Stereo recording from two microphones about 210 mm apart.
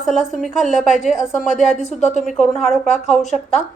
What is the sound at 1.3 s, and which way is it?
Speech, 35° left (ahead or behind).